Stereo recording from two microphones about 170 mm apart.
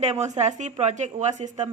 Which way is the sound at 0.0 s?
40° right (ahead or behind).